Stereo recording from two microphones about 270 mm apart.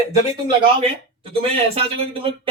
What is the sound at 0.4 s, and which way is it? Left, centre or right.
Speech, centre.